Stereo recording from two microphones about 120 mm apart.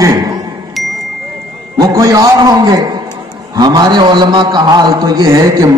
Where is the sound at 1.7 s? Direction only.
30° right (ahead or behind).